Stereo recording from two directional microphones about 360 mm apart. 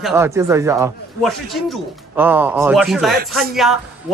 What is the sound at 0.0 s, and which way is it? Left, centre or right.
A man's voice, centre.